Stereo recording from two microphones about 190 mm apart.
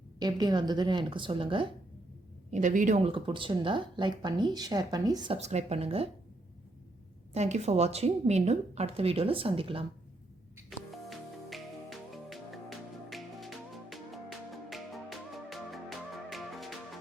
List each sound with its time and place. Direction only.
0.2 s speech: 20° right (ahead or behind)
2.5 s a woman's voice: 40° right (ahead or behind)
3.1 s speech: 25° right (ahead or behind)
5.4 s a woman's voice: 35° right (ahead or behind)
7.3 s a woman's voice: 35° right (ahead or behind)
10.7 s music: centre (ahead or behind)